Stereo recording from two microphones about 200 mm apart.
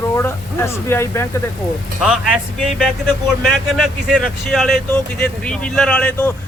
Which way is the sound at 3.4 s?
Centre (ahead or behind).